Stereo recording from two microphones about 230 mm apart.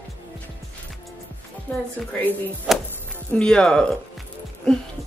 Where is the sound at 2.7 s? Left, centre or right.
Centre.